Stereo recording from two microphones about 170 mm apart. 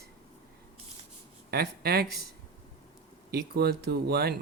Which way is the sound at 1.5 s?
65° right (ahead or behind).